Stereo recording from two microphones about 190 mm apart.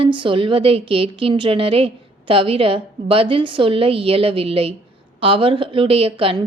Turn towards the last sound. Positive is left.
turn(degrees=-30)  # may be behind; listen again after turning